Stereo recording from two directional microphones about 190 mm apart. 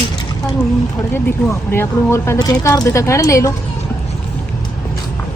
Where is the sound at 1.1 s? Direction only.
10° left (ahead or behind).